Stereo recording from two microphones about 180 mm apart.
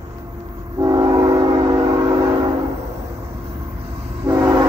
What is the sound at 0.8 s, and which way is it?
Train, 20° right (ahead or behind).